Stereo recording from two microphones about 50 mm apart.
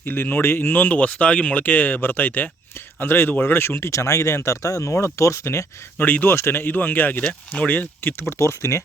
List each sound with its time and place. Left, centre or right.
0.0 s speech: left
2.7 s speech: left
3.9 s speech: left
6.0 s speech: left
6.2 s speech: left
8.3 s speech: left